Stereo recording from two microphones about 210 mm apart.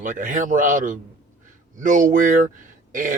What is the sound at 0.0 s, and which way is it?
Speech, 40° right (ahead or behind).